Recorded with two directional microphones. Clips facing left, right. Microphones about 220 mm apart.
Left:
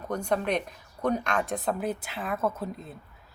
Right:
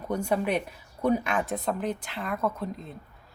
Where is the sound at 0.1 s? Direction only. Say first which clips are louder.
Right 1 dB; 10° right (ahead or behind).